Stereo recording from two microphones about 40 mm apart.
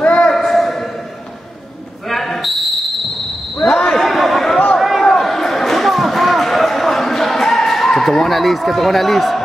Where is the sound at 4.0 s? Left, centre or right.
Centre.